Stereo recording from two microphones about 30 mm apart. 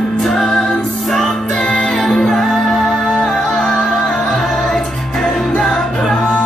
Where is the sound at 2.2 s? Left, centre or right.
Centre.